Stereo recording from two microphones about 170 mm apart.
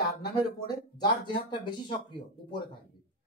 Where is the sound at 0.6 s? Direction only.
25° left (ahead or behind).